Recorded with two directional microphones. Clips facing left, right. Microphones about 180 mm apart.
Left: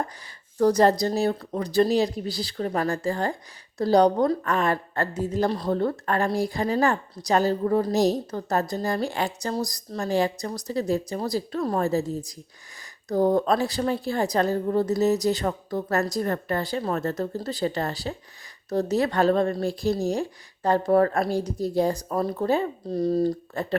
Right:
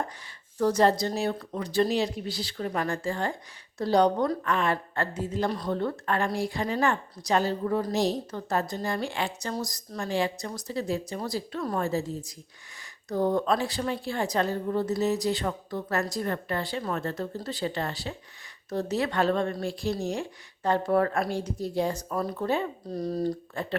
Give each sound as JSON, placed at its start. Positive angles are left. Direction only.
{"t": 0.6, "sound": "a woman's voice", "side_deg": 40}
{"t": 23.6, "sound": "a woman's voice", "side_deg": 40}